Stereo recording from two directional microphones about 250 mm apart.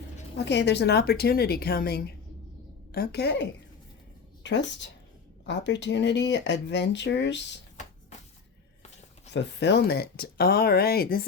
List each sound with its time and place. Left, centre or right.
0.3 s speech: left
9.3 s speech: left